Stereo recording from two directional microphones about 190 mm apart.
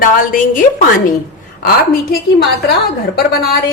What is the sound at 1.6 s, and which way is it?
A woman's voice, 50° left (ahead or behind).